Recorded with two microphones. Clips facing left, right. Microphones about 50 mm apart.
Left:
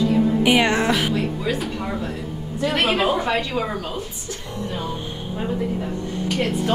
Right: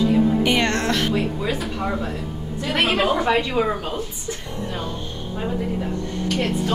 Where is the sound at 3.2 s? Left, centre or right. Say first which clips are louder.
Right 3 dB; centre.